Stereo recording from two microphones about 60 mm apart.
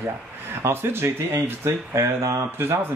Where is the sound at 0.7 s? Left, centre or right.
Right.